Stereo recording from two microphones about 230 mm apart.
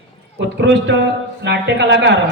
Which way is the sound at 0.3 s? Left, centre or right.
Right.